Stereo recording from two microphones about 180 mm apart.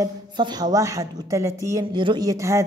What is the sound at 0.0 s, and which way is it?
A man's voice, 25° right (ahead or behind).